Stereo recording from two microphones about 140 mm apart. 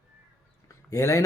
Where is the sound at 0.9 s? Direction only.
20° left (ahead or behind).